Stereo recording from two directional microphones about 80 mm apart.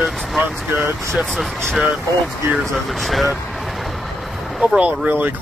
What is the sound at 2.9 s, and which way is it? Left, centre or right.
Speech, centre.